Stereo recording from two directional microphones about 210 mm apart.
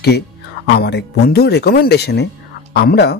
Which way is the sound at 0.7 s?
55° left (ahead or behind).